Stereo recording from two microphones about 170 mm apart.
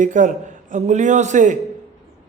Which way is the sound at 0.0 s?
50° right (ahead or behind).